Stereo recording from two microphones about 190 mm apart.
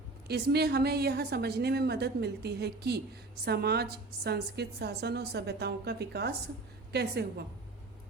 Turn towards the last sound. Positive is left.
turn(degrees=-60)  # may be behind; listen again after turning